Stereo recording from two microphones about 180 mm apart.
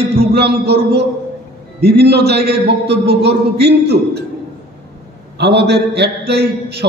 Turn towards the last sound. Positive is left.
turn(degrees=-65)  # may be behind; listen again after turning